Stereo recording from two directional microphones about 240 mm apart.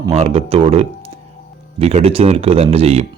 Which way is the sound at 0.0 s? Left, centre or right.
Right.